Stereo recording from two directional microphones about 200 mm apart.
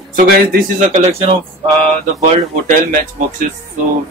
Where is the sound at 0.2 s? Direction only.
40° right (ahead or behind).